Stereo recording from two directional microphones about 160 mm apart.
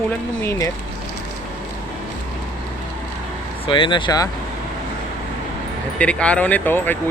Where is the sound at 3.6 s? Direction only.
30° left (ahead or behind).